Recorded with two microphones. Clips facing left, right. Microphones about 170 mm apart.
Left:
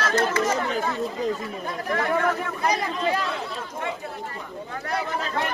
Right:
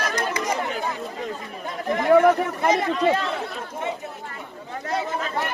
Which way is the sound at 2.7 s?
25° right (ahead or behind).